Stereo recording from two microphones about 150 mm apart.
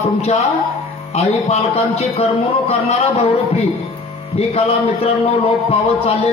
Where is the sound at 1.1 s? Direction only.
45° left (ahead or behind).